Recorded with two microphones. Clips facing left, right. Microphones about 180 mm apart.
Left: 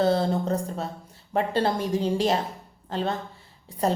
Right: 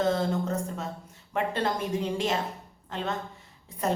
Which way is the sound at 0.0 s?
35° left (ahead or behind).